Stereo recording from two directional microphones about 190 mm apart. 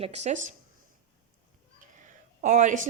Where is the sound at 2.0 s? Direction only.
40° right (ahead or behind).